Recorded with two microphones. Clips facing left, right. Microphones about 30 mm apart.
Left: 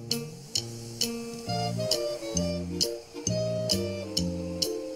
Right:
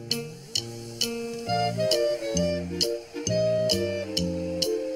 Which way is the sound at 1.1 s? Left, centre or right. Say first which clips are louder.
Right 7 dB; right.